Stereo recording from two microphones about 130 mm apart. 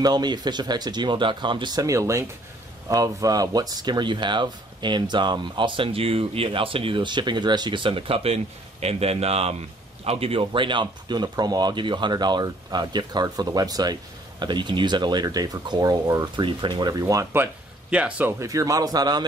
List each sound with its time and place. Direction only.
0.0 s speech: 35° right (ahead or behind); by 18.3 s 10° right (ahead or behind)
18.4 s speech: 25° right (ahead or behind)